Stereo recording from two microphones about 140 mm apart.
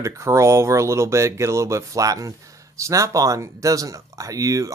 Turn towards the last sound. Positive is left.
turn(degrees=-25)  # may be behind; listen again after turning